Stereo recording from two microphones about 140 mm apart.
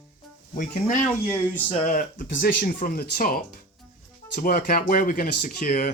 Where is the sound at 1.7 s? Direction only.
55° left (ahead or behind); by 5.9 s 70° left (ahead or behind).